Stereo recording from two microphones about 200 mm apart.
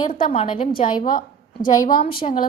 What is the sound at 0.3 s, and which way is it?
Speech, 30° left (ahead or behind).